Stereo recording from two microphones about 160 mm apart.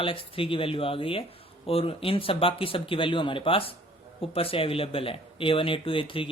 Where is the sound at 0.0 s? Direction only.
35° left (ahead or behind).